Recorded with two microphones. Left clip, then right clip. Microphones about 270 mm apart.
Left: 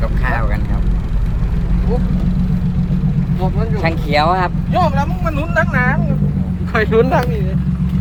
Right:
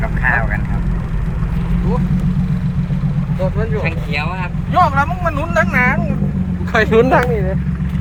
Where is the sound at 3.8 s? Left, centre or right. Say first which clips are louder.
Left 6 dB; centre.